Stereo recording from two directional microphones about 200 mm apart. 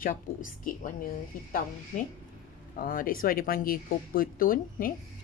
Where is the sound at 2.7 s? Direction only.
45° left (ahead or behind).